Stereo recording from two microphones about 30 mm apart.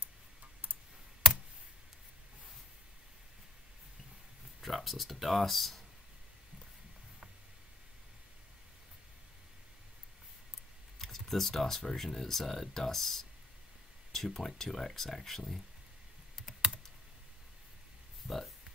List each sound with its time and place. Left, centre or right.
4.6 s speech: centre
11.0 s speech: centre
18.2 s a sound: centre